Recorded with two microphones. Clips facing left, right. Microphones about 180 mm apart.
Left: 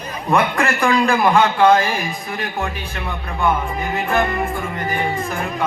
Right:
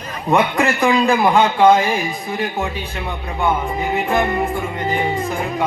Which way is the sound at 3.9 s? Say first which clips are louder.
Right 1 dB; 15° right (ahead or behind).